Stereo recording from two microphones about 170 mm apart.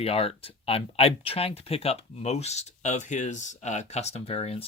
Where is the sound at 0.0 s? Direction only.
35° left (ahead or behind).